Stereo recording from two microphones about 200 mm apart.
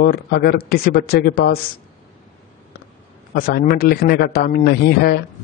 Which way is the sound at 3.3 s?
50° left (ahead or behind).